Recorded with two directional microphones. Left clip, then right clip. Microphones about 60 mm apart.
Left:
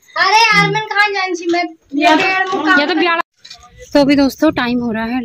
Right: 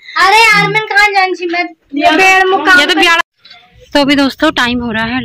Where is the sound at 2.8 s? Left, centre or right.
Left.